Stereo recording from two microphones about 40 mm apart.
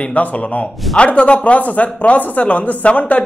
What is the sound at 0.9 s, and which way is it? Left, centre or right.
Speech, left.